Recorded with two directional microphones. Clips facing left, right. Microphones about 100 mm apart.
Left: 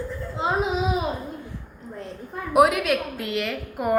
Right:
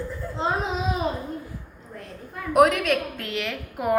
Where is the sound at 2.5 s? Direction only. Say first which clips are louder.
Even; 5° left (ahead or behind).